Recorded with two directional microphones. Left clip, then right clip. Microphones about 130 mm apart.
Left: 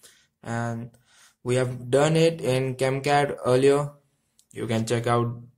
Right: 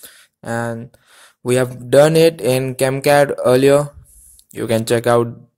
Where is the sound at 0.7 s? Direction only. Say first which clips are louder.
Right 6 dB; 50° right (ahead or behind).